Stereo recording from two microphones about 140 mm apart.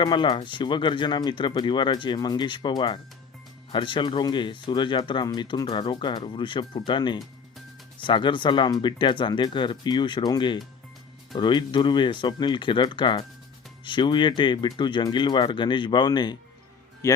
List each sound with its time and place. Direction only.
0.0 s speech: 35° left (ahead or behind)